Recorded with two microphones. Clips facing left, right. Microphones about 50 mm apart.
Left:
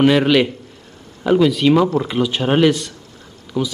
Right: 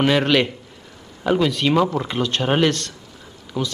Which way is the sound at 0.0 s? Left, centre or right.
Centre.